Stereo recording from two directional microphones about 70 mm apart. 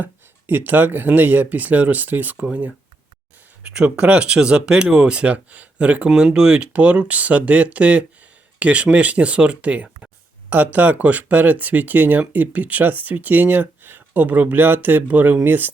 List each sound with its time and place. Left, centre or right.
0.0 s speech: right
3.7 s speech: centre